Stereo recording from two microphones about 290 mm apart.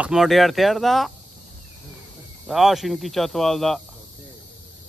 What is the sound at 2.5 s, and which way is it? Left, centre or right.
Speech, centre.